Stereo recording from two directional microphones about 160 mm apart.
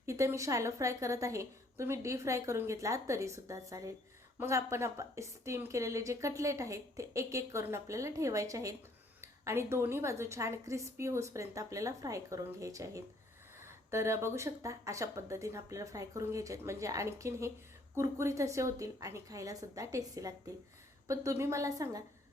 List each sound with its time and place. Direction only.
0.0 s a woman's voice: 15° right (ahead or behind)